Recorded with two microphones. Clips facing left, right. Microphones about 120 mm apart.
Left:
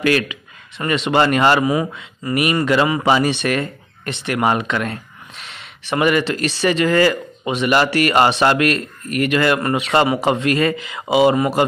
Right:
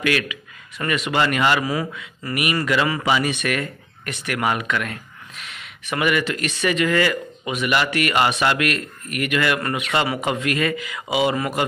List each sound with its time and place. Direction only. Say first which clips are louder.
0.0 s a man's voice: left 5 dB; 30° left (ahead or behind)
1.6 s speech: left 6 dB; 20° left (ahead or behind)